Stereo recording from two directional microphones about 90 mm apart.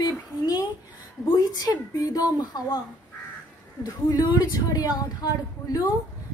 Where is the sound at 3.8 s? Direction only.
45° left (ahead or behind).